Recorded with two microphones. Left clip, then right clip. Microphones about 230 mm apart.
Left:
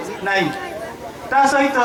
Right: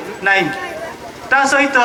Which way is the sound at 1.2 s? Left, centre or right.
Right.